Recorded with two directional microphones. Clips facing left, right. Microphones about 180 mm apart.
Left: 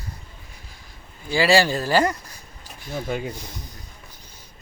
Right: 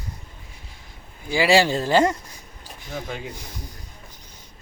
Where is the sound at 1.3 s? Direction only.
20° right (ahead or behind).